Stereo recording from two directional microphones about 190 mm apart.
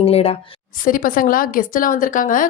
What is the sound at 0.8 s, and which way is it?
A woman's voice, 45° left (ahead or behind).